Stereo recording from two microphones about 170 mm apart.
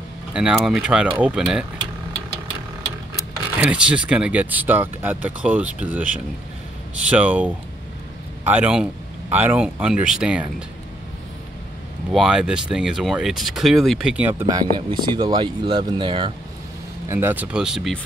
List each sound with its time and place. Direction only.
0.3 s speech: 5° right (ahead or behind)
3.5 s speech: 5° right (ahead or behind)
12.1 s speech: centre (ahead or behind)
14.5 s speech: 25° right (ahead or behind)
17.1 s speech: 10° right (ahead or behind)